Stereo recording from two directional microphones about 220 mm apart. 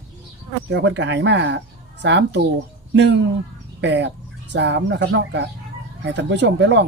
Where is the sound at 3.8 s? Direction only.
55° right (ahead or behind).